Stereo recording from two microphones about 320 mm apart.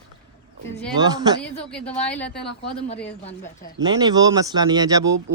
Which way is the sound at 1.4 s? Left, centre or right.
Centre.